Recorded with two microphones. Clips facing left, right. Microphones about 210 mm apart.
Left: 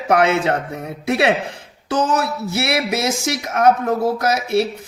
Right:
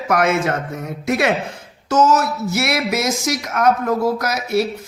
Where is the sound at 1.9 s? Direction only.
30° left (ahead or behind).